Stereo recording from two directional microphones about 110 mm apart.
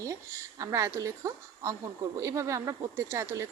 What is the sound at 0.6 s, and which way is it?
A woman's voice, 30° right (ahead or behind).